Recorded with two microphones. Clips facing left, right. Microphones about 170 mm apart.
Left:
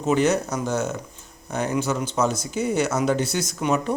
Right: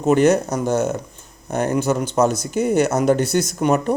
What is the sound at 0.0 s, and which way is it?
Speech, 55° right (ahead or behind).